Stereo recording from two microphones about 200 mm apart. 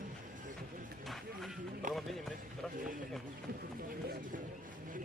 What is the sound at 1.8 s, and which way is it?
Speech, 40° right (ahead or behind).